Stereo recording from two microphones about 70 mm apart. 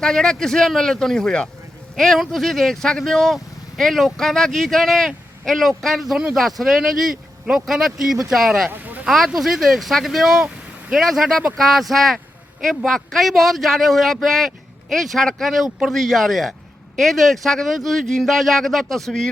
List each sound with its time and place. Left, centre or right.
0.0 s speech: centre
8.7 s a sound: right
9.0 s speech: centre